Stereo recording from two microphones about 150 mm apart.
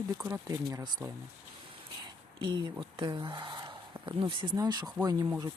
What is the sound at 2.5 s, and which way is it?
Speech, 30° right (ahead or behind).